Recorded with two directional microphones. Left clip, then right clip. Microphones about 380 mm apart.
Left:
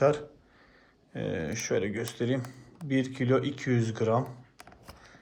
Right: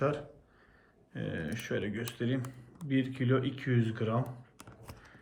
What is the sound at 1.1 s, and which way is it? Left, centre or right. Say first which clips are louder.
Speech: left 6 dB; centre.